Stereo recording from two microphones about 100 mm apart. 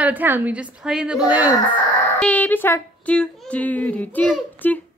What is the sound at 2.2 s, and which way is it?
A woman's voice, 15° left (ahead or behind).